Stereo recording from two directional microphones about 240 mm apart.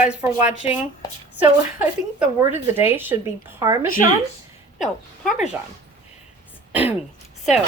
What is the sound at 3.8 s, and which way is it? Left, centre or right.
Speech, left.